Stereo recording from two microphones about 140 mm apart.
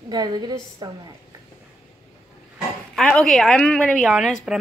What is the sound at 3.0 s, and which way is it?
A woman's voice, 5° left (ahead or behind).